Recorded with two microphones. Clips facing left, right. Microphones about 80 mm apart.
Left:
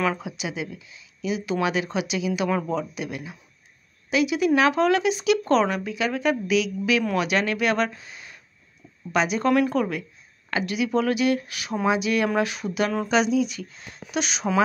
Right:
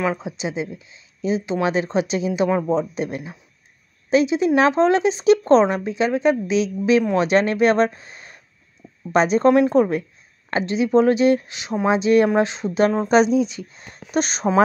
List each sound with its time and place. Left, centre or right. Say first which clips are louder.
0.0 s speech: right 3 dB; right